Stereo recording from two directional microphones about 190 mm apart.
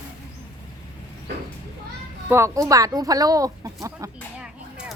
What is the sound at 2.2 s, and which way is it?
A woman's voice, 15° right (ahead or behind).